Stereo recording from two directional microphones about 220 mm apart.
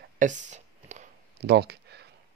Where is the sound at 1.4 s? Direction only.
50° right (ahead or behind).